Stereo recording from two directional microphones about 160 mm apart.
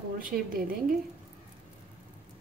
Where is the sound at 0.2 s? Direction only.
65° right (ahead or behind).